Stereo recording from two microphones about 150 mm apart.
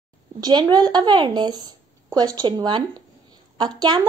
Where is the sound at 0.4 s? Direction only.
30° right (ahead or behind).